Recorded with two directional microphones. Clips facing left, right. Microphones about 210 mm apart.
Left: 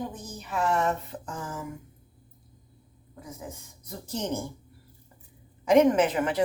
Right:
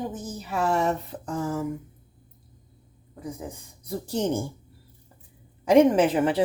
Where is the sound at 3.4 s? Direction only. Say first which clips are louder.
Right 3 dB; 30° right (ahead or behind).